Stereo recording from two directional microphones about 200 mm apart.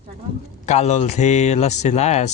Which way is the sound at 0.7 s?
35° left (ahead or behind).